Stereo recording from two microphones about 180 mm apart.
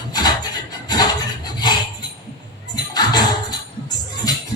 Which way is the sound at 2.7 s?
25° left (ahead or behind).